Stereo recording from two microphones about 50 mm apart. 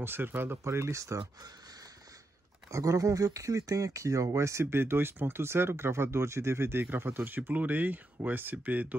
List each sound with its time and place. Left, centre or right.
0.0 s speech: right
0.7 s speech: right
2.7 s speech: right
6.8 s speech: right